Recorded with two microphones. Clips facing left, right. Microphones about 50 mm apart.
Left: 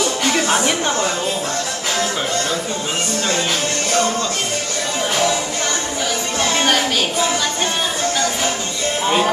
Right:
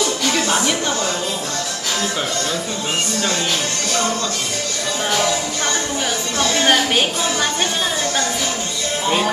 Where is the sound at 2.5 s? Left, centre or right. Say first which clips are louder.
Left 1 dB; left.